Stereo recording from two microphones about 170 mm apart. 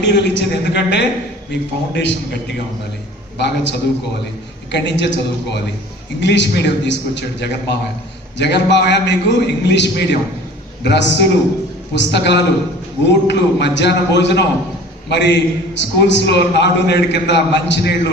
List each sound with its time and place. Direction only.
0.0 s a man's voice: 90° left
3.3 s a man's voice: 85° left